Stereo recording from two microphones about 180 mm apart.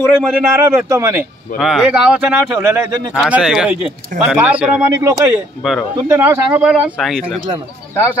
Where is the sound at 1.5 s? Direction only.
Centre (ahead or behind).